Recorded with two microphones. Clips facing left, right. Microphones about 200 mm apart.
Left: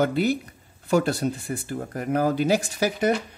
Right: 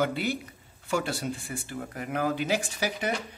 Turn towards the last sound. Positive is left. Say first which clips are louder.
# left 7 dB
turn(degrees=45)  # may be behind; listen again after turning